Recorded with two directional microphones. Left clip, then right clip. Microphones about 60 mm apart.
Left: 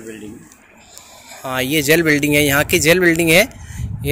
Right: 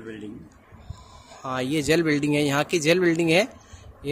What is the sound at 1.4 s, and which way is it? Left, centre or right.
Speech, centre.